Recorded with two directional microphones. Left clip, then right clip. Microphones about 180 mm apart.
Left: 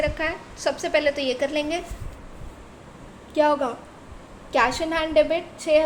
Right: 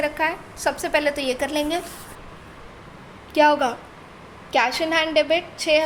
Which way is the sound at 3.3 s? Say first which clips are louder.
Right 3 dB; 15° right (ahead or behind).